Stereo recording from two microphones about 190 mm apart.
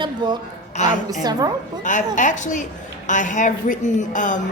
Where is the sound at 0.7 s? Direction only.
40° left (ahead or behind).